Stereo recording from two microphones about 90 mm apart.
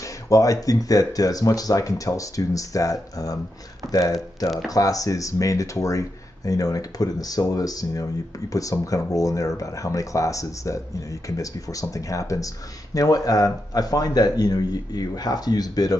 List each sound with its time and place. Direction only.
0.0 s a man's voice: 40° left (ahead or behind)